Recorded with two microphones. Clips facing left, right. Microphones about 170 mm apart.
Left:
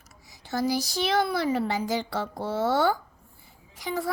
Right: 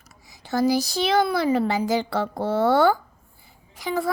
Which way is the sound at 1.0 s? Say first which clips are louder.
Right 4 dB; 90° right.